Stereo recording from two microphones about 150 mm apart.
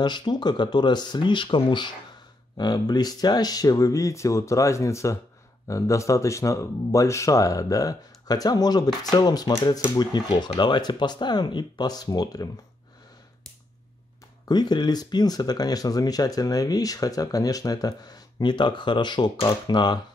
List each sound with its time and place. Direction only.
0.0 s speech: 30° left (ahead or behind)
14.5 s speech: 30° left (ahead or behind)